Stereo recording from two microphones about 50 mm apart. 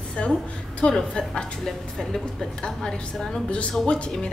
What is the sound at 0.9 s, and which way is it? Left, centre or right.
A woman's voice, centre.